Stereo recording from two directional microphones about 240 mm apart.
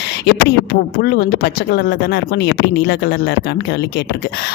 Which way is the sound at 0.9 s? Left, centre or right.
Left.